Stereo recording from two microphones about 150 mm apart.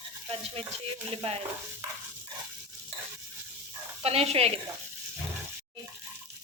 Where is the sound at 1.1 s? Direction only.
40° right (ahead or behind).